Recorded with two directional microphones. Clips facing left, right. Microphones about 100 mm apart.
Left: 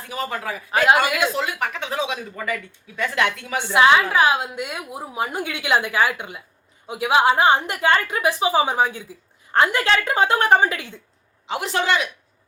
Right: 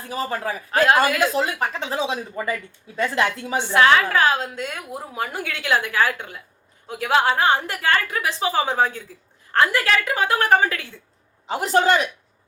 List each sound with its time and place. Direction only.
0.1 s speech: 35° right (ahead or behind)
3.7 s a woman's voice: 15° left (ahead or behind)
11.4 s speech: 40° right (ahead or behind)